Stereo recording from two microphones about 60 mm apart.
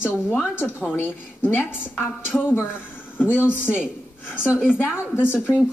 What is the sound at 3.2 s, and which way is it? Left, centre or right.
A woman's voice, left.